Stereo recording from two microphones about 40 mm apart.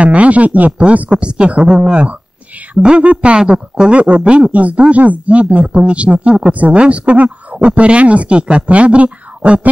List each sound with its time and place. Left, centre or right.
0.0 s speech: right
1.1 s speech: right
4.2 s speech: right
4.5 s speech: right